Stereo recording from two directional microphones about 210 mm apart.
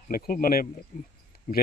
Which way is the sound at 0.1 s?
40° left (ahead or behind).